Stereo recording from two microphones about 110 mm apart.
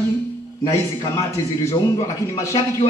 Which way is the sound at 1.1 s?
30° left (ahead or behind).